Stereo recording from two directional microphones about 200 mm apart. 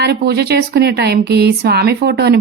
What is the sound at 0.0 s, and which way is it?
Speech, 55° right (ahead or behind).